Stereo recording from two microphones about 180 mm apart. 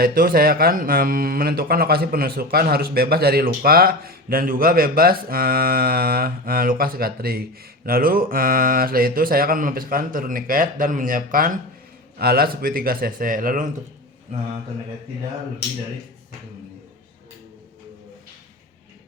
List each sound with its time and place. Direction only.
0.0 s a man's voice: 55° right (ahead or behind)
14.3 s a man's voice: 35° right (ahead or behind)